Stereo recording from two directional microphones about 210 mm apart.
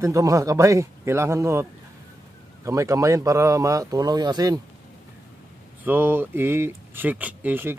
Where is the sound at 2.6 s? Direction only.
15° right (ahead or behind).